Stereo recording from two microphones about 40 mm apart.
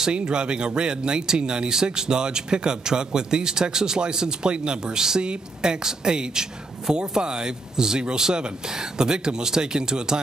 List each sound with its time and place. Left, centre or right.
0.1 s speech: right